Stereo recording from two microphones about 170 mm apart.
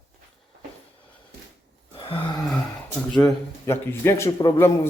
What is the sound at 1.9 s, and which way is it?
Groan, 30° left (ahead or behind).